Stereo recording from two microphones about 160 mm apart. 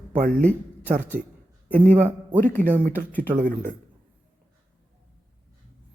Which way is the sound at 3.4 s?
55° right (ahead or behind).